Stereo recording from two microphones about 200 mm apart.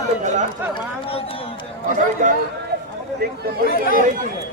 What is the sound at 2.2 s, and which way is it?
Speech, 40° right (ahead or behind).